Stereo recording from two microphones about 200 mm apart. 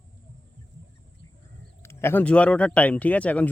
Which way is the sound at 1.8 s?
10° left (ahead or behind).